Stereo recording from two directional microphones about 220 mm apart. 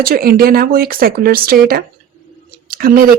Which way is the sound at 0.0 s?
40° right (ahead or behind).